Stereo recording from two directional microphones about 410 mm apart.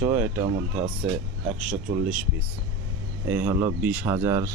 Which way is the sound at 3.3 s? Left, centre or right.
Centre.